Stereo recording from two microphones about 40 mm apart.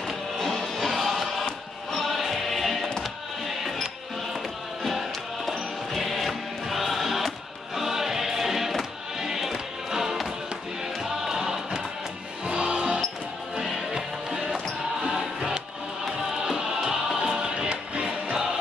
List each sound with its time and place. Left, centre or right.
0.7 s music: centre
4.8 s music: centre; by 18.5 s right